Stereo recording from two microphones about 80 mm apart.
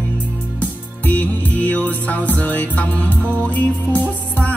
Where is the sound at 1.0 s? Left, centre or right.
Centre.